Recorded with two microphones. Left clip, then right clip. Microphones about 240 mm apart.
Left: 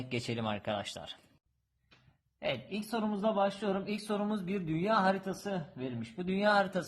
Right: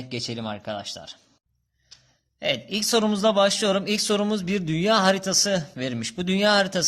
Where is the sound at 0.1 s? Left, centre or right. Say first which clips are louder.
Right 5 dB; centre.